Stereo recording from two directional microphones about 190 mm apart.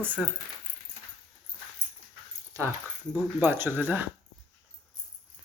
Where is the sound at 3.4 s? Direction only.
10° right (ahead or behind).